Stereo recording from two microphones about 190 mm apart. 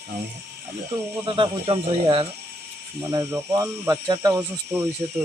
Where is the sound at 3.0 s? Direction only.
15° right (ahead or behind).